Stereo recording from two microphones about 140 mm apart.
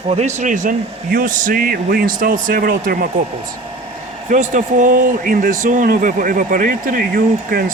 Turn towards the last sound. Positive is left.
turn(degrees=-90)